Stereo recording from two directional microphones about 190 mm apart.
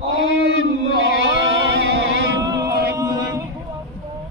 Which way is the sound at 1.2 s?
70° right (ahead or behind).